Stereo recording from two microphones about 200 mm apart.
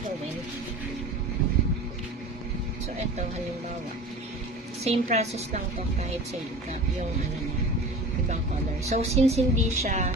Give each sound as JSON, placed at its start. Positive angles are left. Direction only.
{"t": 4.8, "sound": "a woman's voice", "side_deg": -30}
{"t": 8.9, "sound": "a woman's voice", "side_deg": -30}